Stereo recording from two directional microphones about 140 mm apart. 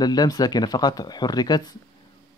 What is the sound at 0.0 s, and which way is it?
Speech, 30° left (ahead or behind).